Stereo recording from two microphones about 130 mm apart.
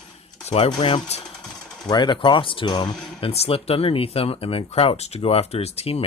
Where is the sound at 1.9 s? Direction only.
35° left (ahead or behind).